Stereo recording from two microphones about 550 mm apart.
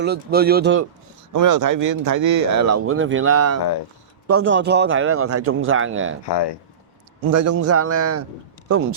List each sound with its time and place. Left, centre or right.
0.0 s speech: centre
1.3 s speech: right
6.2 s speech: left
7.3 s speech: right